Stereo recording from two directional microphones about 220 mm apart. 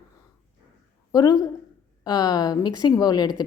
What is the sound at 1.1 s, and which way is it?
A woman's voice, 15° left (ahead or behind).